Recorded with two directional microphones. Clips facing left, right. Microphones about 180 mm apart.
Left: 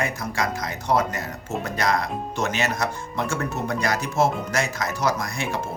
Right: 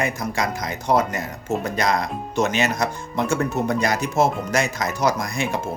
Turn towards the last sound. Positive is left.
turn(degrees=-15)  # may be behind; listen again after turning